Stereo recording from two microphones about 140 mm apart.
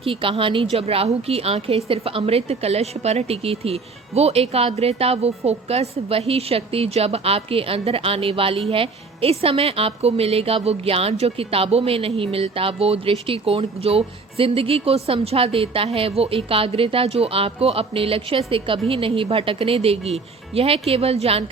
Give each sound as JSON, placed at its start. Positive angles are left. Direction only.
{"t": 0.0, "sound": "a woman's voice", "side_deg": -40}